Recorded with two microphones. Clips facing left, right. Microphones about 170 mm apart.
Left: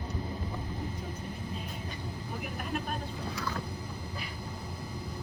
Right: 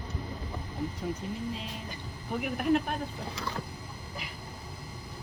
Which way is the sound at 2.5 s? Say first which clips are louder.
Right 10 dB; 60° right (ahead or behind).